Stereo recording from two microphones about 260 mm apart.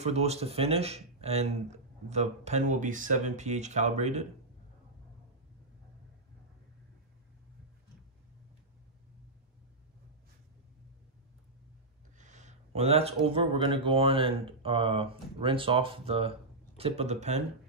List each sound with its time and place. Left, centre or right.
0.0 s speech: right
12.2 s speech: right